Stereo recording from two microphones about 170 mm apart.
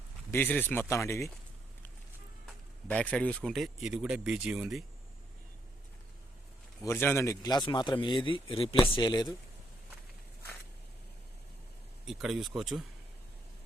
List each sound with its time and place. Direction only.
0.3 s speech: 10° left (ahead or behind)
2.8 s speech: 10° left (ahead or behind)
6.8 s a man's voice: 15° left (ahead or behind)
12.0 s speech: 5° right (ahead or behind)